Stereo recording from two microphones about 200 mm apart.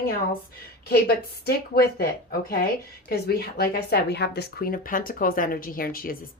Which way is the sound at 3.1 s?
50° left (ahead or behind).